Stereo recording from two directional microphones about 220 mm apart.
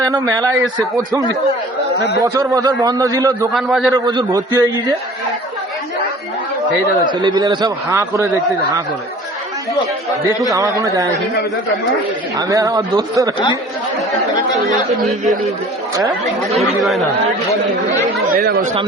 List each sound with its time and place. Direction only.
0.0 s a man's voice: 15° right (ahead or behind)
2.2 s a man's voice: 15° right (ahead or behind)
3.5 s speech: centre (ahead or behind)
3.9 s a man's voice: 15° right (ahead or behind)
7.1 s a man's voice: 20° right (ahead or behind)
10.5 s a man's voice: 15° right (ahead or behind)
12.4 s a man's voice: 15° right (ahead or behind)
15.0 s speech: centre (ahead or behind)
18.3 s speech: 40° right (ahead or behind)